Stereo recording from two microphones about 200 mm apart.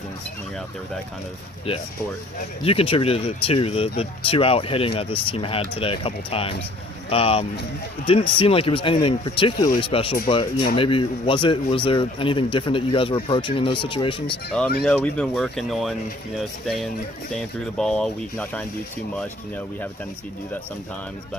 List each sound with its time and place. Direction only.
2.6 s speech: 30° left (ahead or behind)
14.8 s speech: 5° left (ahead or behind)